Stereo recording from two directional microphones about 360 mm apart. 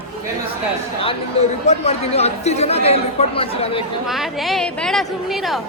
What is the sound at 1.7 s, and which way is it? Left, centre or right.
Speech, centre.